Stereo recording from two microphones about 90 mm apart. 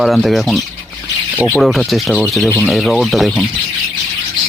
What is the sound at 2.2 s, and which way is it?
Speech, centre (ahead or behind).